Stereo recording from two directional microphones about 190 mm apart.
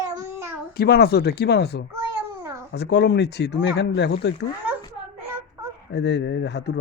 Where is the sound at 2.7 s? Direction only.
60° left (ahead or behind).